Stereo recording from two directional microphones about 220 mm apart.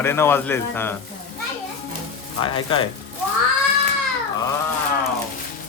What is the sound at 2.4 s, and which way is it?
Speech, 20° left (ahead or behind).